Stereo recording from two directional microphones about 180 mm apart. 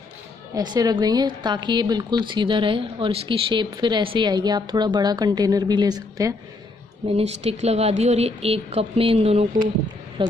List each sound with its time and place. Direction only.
0.6 s a woman's voice: 20° right (ahead or behind)
7.1 s speech: 35° right (ahead or behind)